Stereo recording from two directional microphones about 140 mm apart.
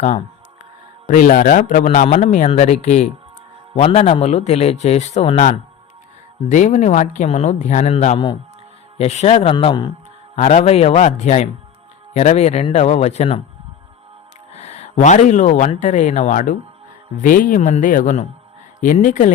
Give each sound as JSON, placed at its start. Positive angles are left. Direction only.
{"t": 1.0, "sound": "a man's voice", "side_deg": 70}
{"t": 6.5, "sound": "a man's voice", "side_deg": 60}
{"t": 10.3, "sound": "a man's voice", "side_deg": 55}
{"t": 14.5, "sound": "a man's voice", "side_deg": 50}